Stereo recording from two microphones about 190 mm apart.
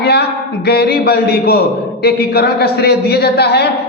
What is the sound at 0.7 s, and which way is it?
A man's voice, 55° left (ahead or behind).